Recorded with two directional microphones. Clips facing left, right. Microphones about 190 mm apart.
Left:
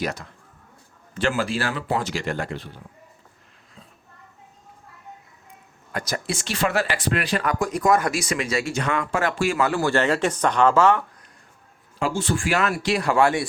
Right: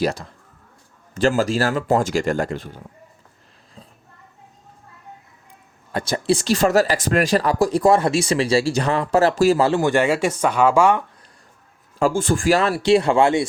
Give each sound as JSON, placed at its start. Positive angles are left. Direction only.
{"t": 0.0, "sound": "speech", "side_deg": -30}
{"t": 5.9, "sound": "speech", "side_deg": -25}
{"t": 11.9, "sound": "speech", "side_deg": -45}